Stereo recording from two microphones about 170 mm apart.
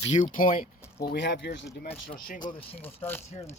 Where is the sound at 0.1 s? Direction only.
50° left (ahead or behind).